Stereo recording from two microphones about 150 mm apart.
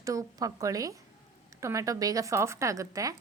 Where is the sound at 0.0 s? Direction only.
20° right (ahead or behind).